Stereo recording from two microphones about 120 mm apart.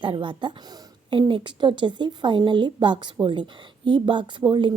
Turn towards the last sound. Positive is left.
turn(degrees=-40)  # may be behind; listen again after turning